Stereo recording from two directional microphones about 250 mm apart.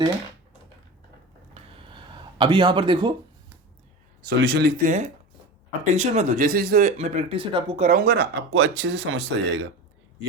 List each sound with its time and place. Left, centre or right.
1.5 s a sound: right
2.4 s speech: centre
4.2 s speech: right